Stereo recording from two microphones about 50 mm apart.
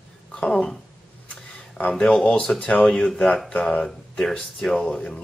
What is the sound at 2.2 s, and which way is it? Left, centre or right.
Speech, centre.